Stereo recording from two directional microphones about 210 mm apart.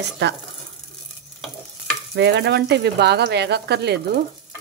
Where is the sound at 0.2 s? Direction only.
55° right (ahead or behind).